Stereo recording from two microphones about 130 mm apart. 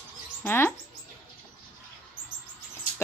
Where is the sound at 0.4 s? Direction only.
15° left (ahead or behind).